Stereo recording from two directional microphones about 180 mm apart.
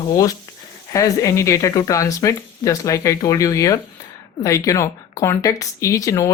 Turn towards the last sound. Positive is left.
turn(degrees=20)  # may be behind; listen again after turning